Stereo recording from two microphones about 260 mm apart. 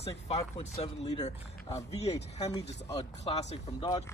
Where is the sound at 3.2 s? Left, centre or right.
Left.